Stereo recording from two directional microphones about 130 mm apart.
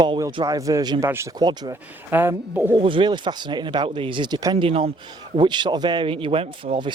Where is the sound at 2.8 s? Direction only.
40° right (ahead or behind).